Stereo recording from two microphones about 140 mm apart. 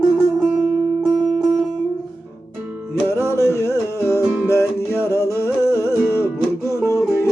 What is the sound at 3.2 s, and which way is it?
Music, 20° left (ahead or behind).